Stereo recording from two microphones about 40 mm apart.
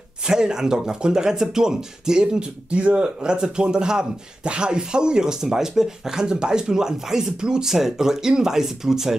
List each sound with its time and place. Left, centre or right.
0.3 s speech: centre
3.3 s speech: right